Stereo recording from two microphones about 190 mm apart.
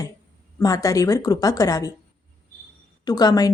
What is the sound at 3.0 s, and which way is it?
Speech, 20° left (ahead or behind).